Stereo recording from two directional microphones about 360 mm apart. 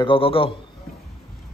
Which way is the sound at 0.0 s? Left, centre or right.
Centre.